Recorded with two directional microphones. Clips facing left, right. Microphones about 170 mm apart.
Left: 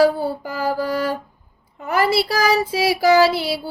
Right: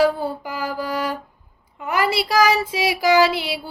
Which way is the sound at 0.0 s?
40° left (ahead or behind).